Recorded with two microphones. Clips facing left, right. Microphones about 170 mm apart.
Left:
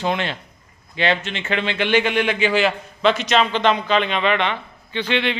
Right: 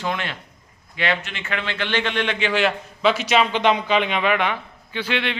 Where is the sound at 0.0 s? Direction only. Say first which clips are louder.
Left 4 dB; 25° left (ahead or behind).